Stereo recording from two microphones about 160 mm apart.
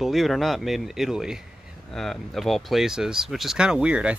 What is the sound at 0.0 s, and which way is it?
Speech, centre (ahead or behind).